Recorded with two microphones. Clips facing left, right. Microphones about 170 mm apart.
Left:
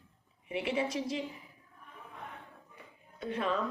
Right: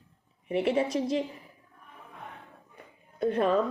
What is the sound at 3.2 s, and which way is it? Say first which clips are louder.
Speech: right 8 dB; 40° right (ahead or behind).